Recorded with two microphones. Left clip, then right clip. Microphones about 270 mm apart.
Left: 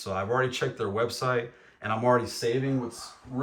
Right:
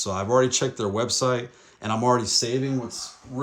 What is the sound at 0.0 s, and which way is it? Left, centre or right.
Speech, centre.